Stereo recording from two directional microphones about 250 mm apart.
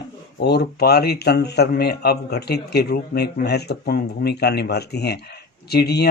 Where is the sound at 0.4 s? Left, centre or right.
Left.